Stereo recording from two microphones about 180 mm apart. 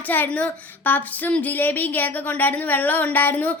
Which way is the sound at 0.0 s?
10° left (ahead or behind).